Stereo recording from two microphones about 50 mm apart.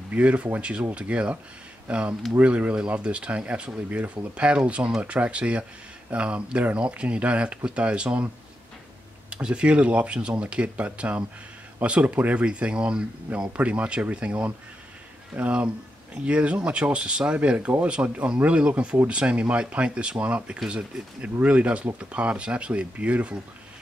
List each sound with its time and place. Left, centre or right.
0.1 s speech: right
9.3 s speech: right